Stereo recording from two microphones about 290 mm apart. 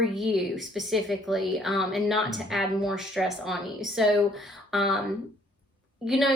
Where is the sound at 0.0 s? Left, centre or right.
Centre.